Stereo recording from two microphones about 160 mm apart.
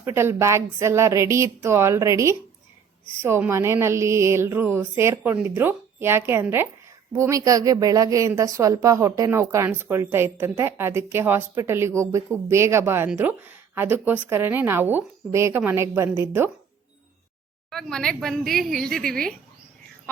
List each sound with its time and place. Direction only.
0.0 s a woman's voice: 15° right (ahead or behind)
17.7 s speech: centre (ahead or behind)